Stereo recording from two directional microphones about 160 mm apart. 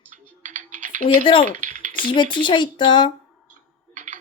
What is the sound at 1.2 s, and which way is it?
Speech, 30° left (ahead or behind).